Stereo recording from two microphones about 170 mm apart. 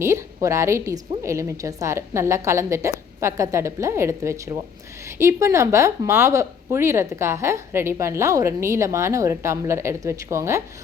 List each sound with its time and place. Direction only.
0.3 s a woman's voice: 15° right (ahead or behind)